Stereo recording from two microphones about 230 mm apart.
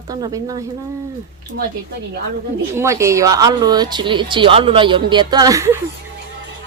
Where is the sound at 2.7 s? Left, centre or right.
Centre.